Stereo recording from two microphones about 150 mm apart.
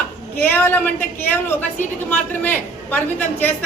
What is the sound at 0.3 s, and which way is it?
A woman's voice, 15° left (ahead or behind).